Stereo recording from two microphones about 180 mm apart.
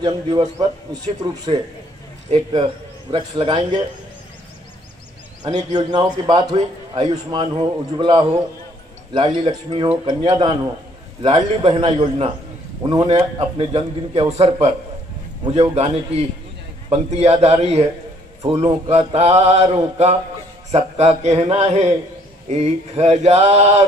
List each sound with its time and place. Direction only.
0.0 s a man's voice: 20° right (ahead or behind)
5.4 s a man's voice: 25° right (ahead or behind)